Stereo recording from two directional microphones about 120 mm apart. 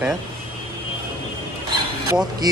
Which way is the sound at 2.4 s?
35° right (ahead or behind).